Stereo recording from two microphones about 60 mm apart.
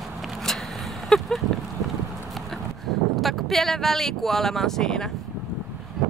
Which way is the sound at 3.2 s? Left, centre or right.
Centre.